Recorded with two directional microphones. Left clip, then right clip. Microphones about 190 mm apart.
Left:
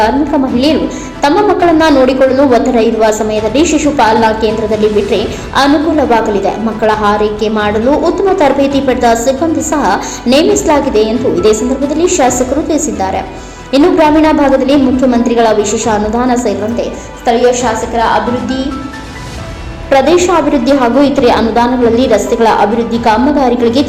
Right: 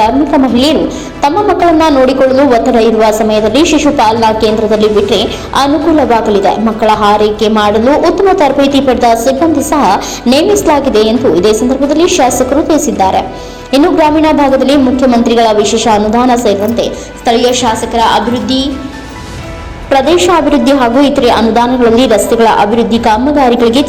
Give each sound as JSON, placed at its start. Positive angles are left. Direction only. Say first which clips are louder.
{"t": 1.2, "sound": "a woman's voice", "louder": "even", "side_deg": -20}
{"t": 19.9, "sound": "a woman's voice", "louder": "right 1 dB", "side_deg": -25}